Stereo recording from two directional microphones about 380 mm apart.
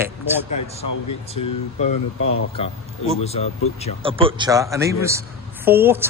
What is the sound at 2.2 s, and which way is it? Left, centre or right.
Speech, left.